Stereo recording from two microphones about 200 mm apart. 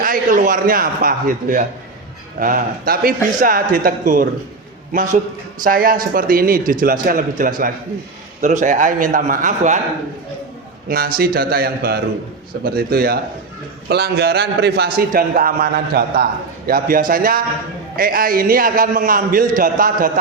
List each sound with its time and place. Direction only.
0.0 s a man's voice: 40° right (ahead or behind)
10.8 s a man's voice: 45° right (ahead or behind)